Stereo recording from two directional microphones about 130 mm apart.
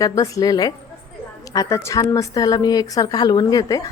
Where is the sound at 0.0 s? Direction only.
25° left (ahead or behind).